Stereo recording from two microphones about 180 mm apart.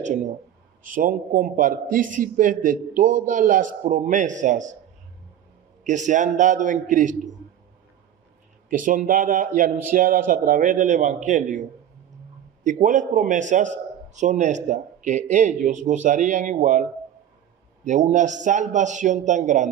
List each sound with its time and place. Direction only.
0.0 s a man's voice: 40° right (ahead or behind)
5.8 s a man's voice: 45° right (ahead or behind)
8.7 s a man's voice: 45° right (ahead or behind)
12.6 s a man's voice: 45° right (ahead or behind)
17.8 s a man's voice: 40° right (ahead or behind)